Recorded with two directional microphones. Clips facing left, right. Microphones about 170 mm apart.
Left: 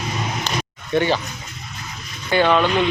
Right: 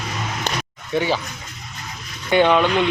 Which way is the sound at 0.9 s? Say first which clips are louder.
Left 2 dB; 5° right (ahead or behind).